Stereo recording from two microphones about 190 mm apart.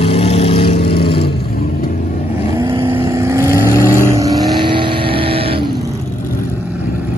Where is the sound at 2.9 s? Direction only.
15° right (ahead or behind).